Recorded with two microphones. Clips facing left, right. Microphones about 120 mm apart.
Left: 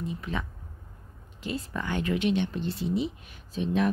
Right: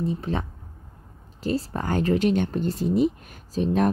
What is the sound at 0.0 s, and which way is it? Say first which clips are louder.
Speech: right 6 dB; 35° right (ahead or behind).